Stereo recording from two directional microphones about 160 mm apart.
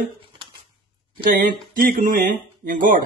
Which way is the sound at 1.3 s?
60° right (ahead or behind).